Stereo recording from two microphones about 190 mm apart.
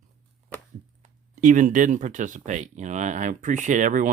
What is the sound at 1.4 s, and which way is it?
Speech, 40° right (ahead or behind).